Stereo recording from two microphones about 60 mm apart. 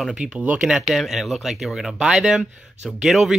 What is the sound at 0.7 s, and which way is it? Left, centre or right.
Speech, centre.